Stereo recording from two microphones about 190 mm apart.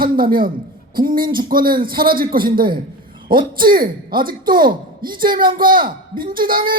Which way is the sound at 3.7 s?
50° right (ahead or behind).